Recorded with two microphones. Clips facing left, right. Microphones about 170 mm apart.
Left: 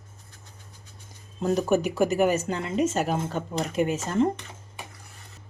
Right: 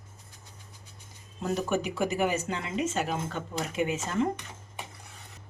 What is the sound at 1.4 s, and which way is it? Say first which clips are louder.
Speech: left 6 dB; 40° left (ahead or behind).